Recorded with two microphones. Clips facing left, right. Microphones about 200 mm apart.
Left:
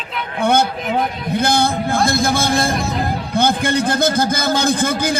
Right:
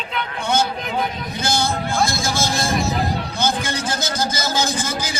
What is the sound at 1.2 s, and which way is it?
A man's voice, 60° left (ahead or behind).